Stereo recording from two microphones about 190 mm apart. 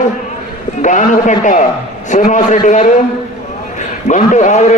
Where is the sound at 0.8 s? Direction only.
40° left (ahead or behind).